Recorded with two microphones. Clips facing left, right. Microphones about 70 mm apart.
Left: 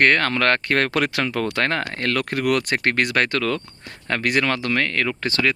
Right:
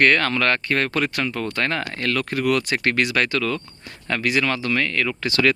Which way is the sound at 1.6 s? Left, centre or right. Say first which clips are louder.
Left 1 dB; left.